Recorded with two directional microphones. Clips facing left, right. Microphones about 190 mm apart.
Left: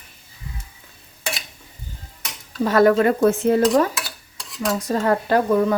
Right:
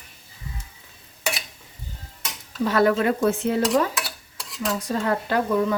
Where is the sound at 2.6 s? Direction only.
45° left (ahead or behind).